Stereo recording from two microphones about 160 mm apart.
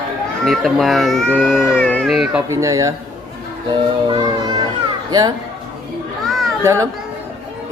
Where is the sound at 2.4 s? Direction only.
20° right (ahead or behind).